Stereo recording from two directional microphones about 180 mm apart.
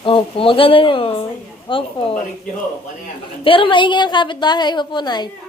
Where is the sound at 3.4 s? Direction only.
30° left (ahead or behind).